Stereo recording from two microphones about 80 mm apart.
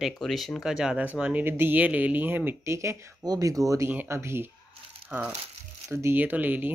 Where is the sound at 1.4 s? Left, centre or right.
Right.